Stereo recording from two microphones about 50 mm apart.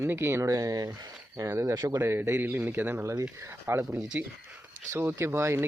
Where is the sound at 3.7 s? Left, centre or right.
Right.